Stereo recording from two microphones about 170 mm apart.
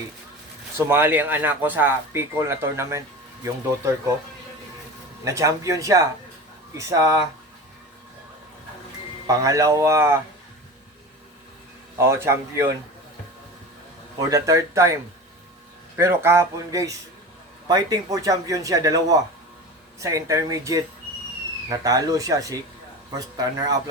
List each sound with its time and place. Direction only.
0.9 s speech: 15° right (ahead or behind)
5.2 s a man's voice: 20° right (ahead or behind)
9.2 s speech: 20° right (ahead or behind)
11.9 s speech: 15° right (ahead or behind)
14.2 s a man's voice: 20° right (ahead or behind)
16.0 s a man's voice: 15° right (ahead or behind)